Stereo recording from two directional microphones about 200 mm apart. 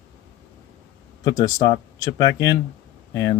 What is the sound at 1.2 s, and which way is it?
Speech, 20° left (ahead or behind).